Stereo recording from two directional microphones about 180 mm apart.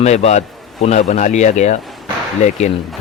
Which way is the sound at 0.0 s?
40° left (ahead or behind).